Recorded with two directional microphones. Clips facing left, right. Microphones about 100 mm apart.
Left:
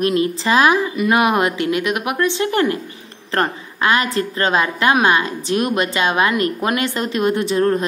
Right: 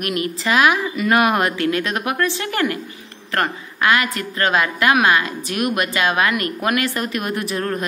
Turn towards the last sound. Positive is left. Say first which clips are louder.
# left 6 dB
turn(degrees=25)  # may be behind; listen again after turning